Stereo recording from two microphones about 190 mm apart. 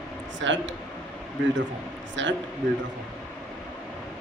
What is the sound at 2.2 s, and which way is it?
Speech, 75° right (ahead or behind).